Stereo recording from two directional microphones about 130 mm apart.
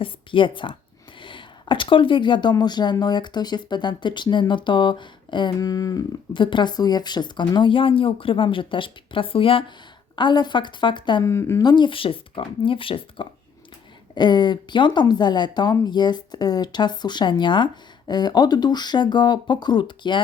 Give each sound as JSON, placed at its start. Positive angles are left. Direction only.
{"t": 0.0, "sound": "speech", "side_deg": 40}
{"t": 6.3, "sound": "speech", "side_deg": 40}
{"t": 11.2, "sound": "a woman's voice", "side_deg": 20}
{"t": 11.6, "sound": "speech", "side_deg": 35}